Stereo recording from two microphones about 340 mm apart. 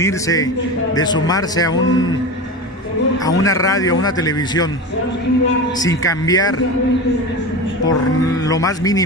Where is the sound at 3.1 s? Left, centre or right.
Centre.